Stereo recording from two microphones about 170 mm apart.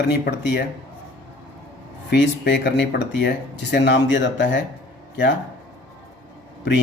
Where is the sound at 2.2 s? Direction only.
90° left.